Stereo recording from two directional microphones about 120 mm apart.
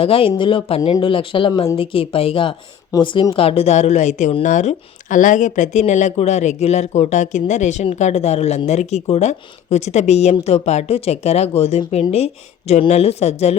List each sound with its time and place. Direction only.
0.0 s a woman's voice: 50° left (ahead or behind); by 4.3 s 80° left
4.4 s a woman's voice: 90° left; by 13.6 s 60° left (ahead or behind)